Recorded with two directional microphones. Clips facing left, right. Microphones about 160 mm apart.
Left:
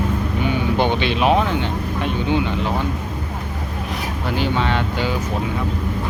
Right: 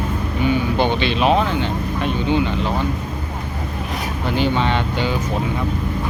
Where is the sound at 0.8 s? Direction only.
15° left (ahead or behind).